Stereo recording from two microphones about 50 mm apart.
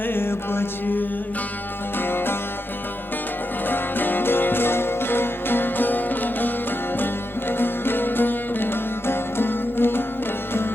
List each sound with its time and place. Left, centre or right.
0.1 s music: left
3.7 s music: left